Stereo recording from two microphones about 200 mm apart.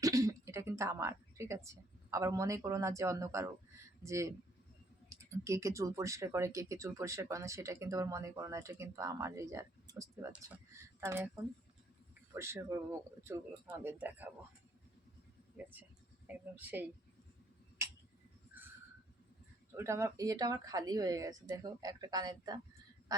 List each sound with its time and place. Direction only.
0.0 s a woman's voice: 15° right (ahead or behind)
12.3 s speech: 15° right (ahead or behind)
16.2 s speech: 10° right (ahead or behind)
19.7 s speech: 15° right (ahead or behind)